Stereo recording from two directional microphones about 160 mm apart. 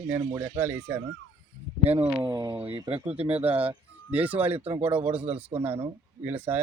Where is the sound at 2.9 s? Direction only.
10° right (ahead or behind).